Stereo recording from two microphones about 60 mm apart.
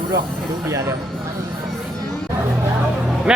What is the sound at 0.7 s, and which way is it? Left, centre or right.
Speech, right.